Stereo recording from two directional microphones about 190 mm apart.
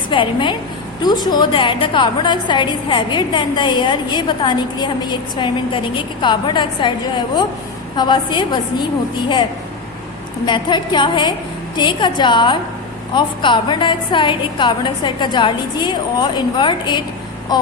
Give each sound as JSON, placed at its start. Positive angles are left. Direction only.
{"t": 0.1, "sound": "a woman's voice", "side_deg": 25}
{"t": 7.9, "sound": "a woman's voice", "side_deg": 25}